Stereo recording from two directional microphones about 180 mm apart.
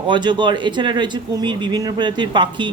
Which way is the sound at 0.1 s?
25° right (ahead or behind).